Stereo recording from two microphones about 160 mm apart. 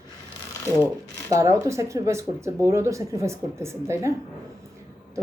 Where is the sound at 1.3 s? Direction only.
20° right (ahead or behind).